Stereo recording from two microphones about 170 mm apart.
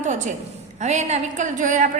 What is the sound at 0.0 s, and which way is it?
A woman's voice, 45° right (ahead or behind).